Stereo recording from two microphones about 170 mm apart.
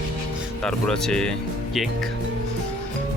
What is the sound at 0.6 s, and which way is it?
Speech, 5° left (ahead or behind).